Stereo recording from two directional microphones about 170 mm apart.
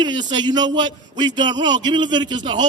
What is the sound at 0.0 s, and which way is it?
A man's voice, 25° right (ahead or behind).